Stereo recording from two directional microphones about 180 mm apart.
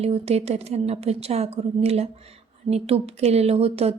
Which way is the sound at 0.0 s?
35° right (ahead or behind).